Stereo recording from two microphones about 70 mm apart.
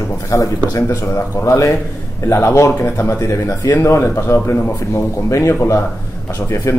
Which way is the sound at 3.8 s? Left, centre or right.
Left.